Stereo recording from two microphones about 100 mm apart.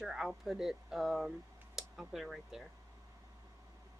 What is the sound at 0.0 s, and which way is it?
Speech, 5° right (ahead or behind).